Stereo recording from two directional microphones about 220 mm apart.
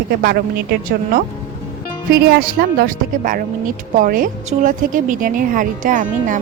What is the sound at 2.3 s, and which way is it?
Speech, 45° right (ahead or behind).